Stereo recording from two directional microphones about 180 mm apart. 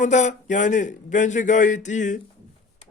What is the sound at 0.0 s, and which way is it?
Speech, 40° left (ahead or behind).